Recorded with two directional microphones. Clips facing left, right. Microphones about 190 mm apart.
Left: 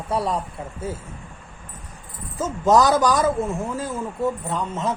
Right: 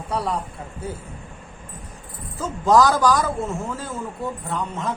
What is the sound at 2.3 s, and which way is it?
Speech, 20° left (ahead or behind).